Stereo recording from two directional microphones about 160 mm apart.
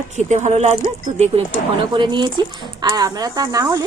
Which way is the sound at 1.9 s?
30° right (ahead or behind).